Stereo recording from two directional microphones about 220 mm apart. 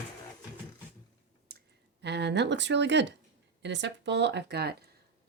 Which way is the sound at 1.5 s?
50° right (ahead or behind).